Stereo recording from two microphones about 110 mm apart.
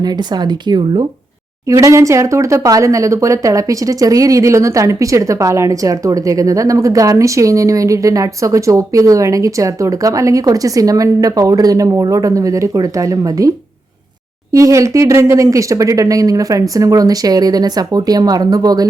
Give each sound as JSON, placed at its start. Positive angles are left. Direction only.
{"t": 0.7, "sound": "speech", "side_deg": -45}
{"t": 1.7, "sound": "speech", "side_deg": -25}
{"t": 14.5, "sound": "speech", "side_deg": -30}